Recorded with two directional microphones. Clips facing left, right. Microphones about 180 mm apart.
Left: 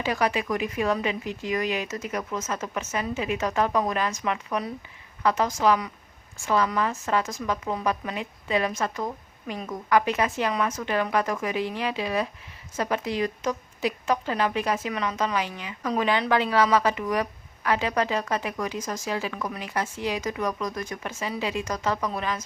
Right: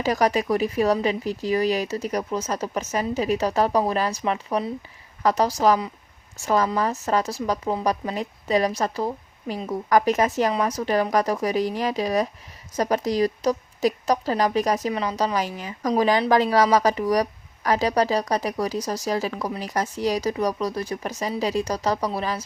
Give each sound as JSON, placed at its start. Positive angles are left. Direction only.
{"t": 0.0, "sound": "a woman's voice", "side_deg": -40}